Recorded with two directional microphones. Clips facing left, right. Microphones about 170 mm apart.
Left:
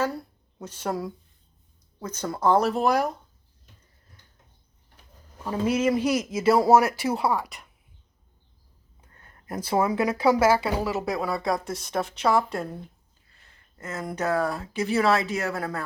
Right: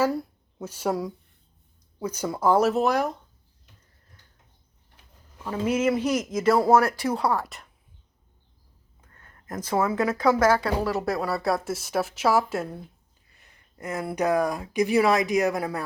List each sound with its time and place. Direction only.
0.0 s speech: 5° right (ahead or behind)
5.8 s speech: 10° left (ahead or behind)
9.0 s a sound: 25° left (ahead or behind)
9.5 s speech: 10° left (ahead or behind)
13.4 s speech: 15° right (ahead or behind)